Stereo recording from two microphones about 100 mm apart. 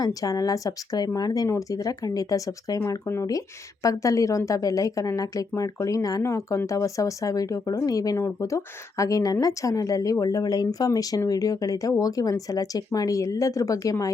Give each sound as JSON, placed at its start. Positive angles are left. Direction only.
{"t": 0.0, "sound": "speech", "side_deg": 35}